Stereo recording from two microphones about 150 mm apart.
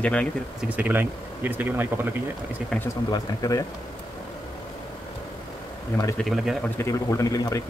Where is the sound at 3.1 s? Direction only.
25° left (ahead or behind).